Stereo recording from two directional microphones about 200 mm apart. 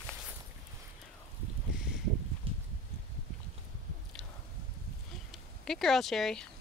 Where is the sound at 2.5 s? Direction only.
25° right (ahead or behind).